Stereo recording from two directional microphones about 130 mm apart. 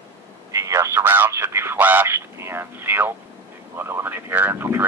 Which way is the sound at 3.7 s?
20° right (ahead or behind).